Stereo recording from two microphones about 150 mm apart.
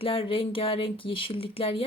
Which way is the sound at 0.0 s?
35° left (ahead or behind).